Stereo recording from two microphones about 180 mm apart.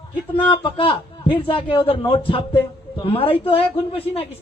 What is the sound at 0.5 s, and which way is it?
A man's voice, 30° left (ahead or behind).